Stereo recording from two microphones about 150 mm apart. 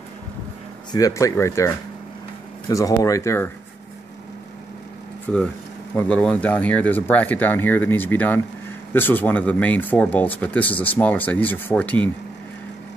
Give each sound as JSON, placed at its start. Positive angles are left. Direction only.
{"t": 0.9, "sound": "speech", "side_deg": 20}
{"t": 2.7, "sound": "speech", "side_deg": 20}
{"t": 5.3, "sound": "speech", "side_deg": 5}